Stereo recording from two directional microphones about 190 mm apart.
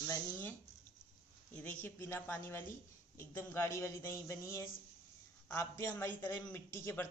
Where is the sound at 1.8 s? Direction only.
10° left (ahead or behind).